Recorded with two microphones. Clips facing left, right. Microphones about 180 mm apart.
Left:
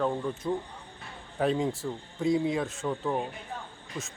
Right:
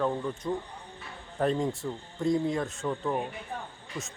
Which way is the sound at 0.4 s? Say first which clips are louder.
Left 1 dB; 10° left (ahead or behind).